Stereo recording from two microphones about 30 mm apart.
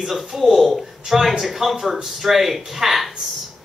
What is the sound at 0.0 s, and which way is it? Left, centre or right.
Speech, centre.